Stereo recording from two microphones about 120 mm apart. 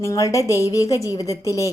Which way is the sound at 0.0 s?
25° left (ahead or behind).